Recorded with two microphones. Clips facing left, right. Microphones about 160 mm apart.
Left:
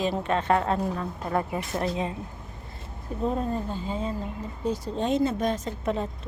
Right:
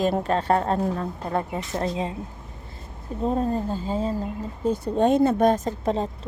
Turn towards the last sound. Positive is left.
turn(degrees=-50)  # may be behind; listen again after turning